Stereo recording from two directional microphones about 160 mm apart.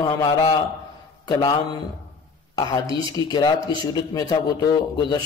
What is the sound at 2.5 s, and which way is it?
Speech, 25° left (ahead or behind).